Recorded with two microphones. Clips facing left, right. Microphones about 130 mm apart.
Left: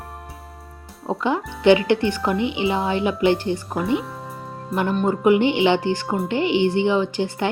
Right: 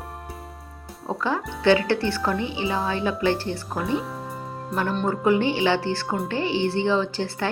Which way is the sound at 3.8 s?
5° left (ahead or behind).